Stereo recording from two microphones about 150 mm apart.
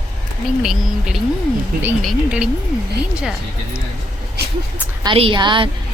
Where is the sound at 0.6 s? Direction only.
5° right (ahead or behind).